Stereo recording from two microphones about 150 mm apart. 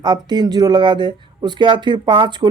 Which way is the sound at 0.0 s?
30° right (ahead or behind).